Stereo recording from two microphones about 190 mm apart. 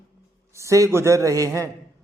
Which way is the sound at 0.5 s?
15° right (ahead or behind).